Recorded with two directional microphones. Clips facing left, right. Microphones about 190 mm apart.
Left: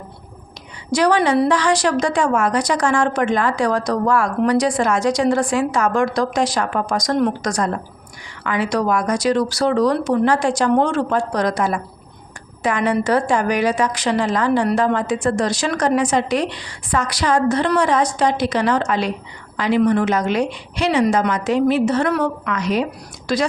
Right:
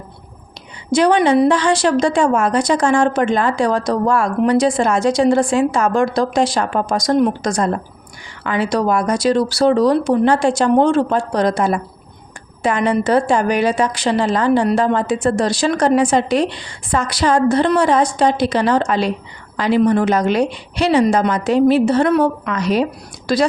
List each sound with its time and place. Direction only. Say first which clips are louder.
0.9 s a woman's voice: right 3 dB; 25° right (ahead or behind)